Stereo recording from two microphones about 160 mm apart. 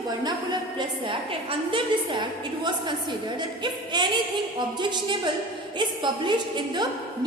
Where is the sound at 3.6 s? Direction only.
30° right (ahead or behind).